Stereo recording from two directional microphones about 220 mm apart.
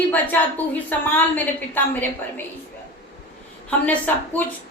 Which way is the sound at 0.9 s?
10° left (ahead or behind).